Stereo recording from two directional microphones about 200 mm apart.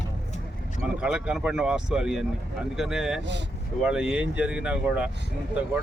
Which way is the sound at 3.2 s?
60° right (ahead or behind).